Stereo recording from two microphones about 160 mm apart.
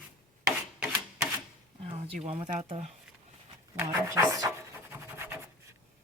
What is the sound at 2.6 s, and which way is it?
Speech, 40° right (ahead or behind).